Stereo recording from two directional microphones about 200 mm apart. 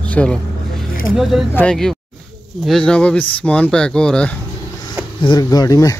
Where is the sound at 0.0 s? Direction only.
5° left (ahead or behind).